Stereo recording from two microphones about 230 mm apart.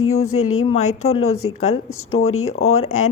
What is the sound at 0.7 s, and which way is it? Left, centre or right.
Speech, left.